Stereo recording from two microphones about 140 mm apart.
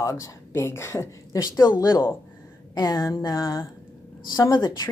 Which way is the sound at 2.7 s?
30° left (ahead or behind).